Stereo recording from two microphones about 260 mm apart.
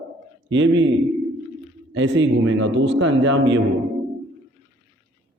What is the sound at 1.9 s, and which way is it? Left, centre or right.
A man's voice, right.